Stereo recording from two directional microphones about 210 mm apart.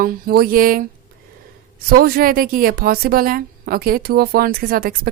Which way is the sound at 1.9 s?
45° right (ahead or behind).